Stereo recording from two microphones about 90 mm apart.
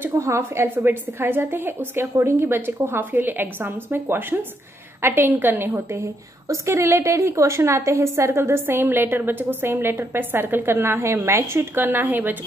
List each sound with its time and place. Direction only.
0.2 s a woman's voice: 30° right (ahead or behind)